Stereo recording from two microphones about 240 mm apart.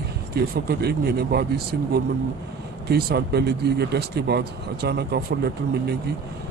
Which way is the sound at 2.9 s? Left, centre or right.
Right.